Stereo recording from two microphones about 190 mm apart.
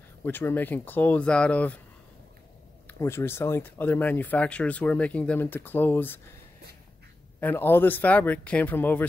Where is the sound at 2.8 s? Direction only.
15° left (ahead or behind).